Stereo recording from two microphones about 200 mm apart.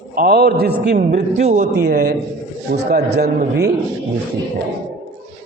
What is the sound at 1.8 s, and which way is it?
A man's voice, 50° right (ahead or behind).